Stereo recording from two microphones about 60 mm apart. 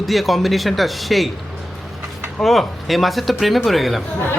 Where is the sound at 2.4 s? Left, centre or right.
Centre.